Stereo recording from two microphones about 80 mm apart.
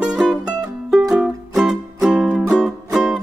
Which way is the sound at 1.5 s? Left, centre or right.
Centre.